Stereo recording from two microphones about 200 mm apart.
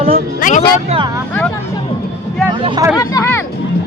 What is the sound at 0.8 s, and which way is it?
Speech, 25° right (ahead or behind).